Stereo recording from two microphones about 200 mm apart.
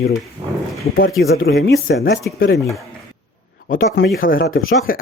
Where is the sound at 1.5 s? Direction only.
55° left (ahead or behind).